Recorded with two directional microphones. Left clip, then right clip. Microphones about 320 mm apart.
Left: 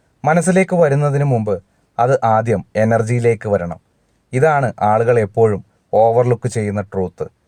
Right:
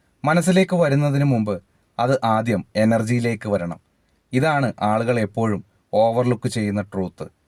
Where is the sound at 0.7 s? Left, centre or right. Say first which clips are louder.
Left 5 dB; left.